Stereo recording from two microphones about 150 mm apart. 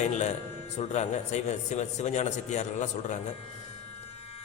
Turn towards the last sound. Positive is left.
turn(degrees=50)  # may be behind; listen again after turning